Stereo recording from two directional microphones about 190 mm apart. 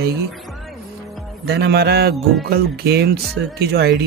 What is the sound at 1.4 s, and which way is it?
Speech, 60° right (ahead or behind).